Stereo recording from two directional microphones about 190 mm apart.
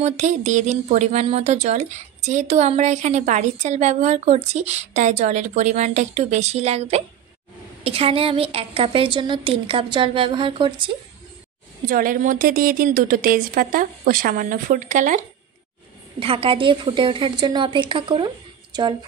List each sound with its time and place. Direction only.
0.0 s a woman's voice: 40° right (ahead or behind)
11.9 s speech: 45° right (ahead or behind)
16.2 s a woman's voice: 30° right (ahead or behind)